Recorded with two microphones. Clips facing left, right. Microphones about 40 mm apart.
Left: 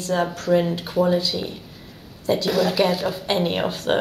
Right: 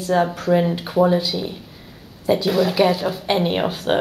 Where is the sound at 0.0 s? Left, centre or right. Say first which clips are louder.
Right 4 dB; centre.